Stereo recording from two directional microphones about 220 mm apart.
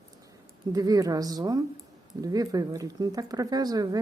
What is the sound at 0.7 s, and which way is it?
Speech, 15° right (ahead or behind).